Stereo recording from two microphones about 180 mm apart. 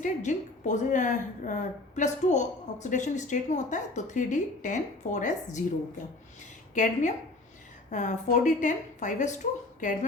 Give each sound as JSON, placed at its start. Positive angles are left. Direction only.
{"t": 0.0, "sound": "speech", "side_deg": 45}
{"t": 6.8, "sound": "speech", "side_deg": 45}